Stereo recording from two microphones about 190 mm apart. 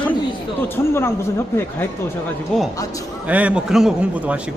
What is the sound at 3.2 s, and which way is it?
Speech, 5° right (ahead or behind).